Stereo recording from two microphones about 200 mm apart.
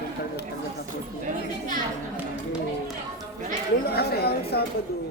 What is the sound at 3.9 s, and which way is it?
Speech, 50° left (ahead or behind).